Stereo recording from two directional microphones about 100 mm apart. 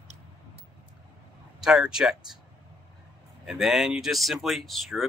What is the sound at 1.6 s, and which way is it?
Speech, 5° right (ahead or behind).